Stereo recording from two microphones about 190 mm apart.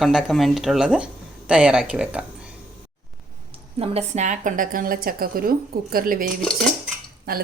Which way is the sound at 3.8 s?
35° right (ahead or behind).